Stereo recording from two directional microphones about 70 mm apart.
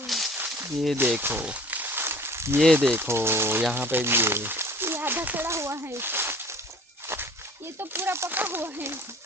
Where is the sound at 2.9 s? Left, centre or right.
Right.